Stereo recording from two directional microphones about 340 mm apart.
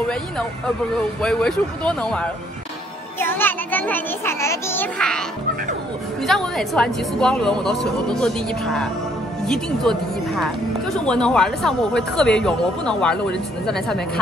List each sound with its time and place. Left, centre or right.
1.2 s speech: centre
6.2 s speech: centre